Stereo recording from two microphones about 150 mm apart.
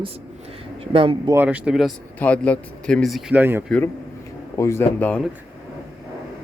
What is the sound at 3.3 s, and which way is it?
Speech, 15° right (ahead or behind).